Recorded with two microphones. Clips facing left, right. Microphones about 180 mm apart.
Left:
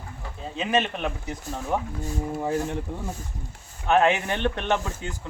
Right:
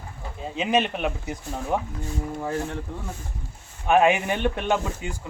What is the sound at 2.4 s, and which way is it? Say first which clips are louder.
Speech: left 2 dB; 20° left (ahead or behind).